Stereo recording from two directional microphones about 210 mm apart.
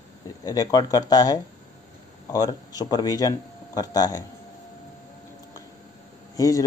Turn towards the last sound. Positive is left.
turn(degrees=15)  # may be behind; listen again after turning